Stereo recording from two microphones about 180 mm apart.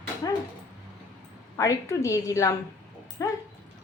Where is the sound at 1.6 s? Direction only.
15° left (ahead or behind).